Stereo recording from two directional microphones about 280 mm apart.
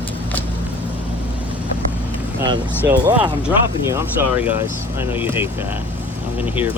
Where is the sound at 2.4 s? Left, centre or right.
Centre.